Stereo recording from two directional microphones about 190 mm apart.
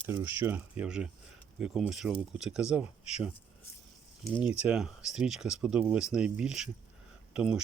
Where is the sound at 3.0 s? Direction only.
35° left (ahead or behind).